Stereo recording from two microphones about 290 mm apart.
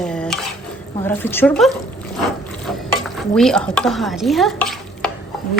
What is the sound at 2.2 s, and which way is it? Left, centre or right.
Stir, centre.